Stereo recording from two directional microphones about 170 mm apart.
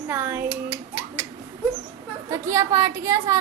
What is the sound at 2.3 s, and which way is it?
A woman's voice, 20° right (ahead or behind).